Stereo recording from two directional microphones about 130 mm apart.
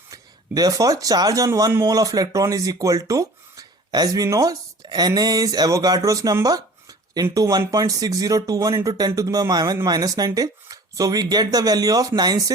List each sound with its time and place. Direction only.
0.1 s speech: 30° right (ahead or behind)